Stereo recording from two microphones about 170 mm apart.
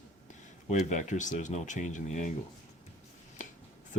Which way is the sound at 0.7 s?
45° left (ahead or behind).